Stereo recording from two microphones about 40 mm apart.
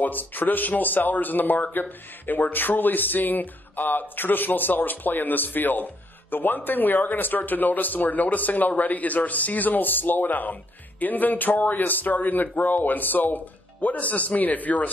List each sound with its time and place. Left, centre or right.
0.0 s speech: left